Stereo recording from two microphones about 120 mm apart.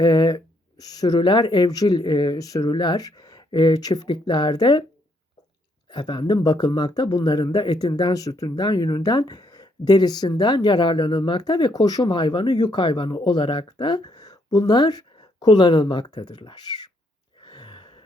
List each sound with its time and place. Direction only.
0.0 s speech: 35° left (ahead or behind)
5.9 s speech: 35° left (ahead or behind)
17.4 s gasp: 40° left (ahead or behind)